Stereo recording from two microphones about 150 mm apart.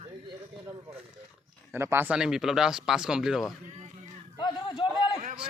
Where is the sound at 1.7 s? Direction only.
15° right (ahead or behind).